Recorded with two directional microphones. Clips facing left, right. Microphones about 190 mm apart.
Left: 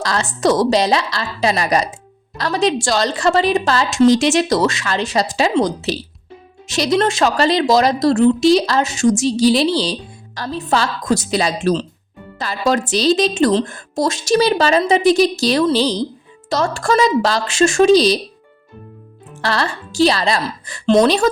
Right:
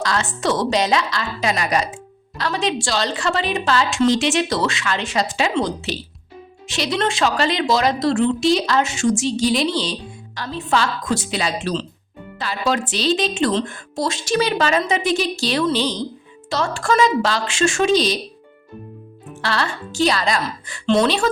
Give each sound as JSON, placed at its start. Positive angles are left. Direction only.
{"t": 0.0, "sound": "a woman's voice", "side_deg": 40}
{"t": 19.4, "sound": "a woman's voice", "side_deg": 40}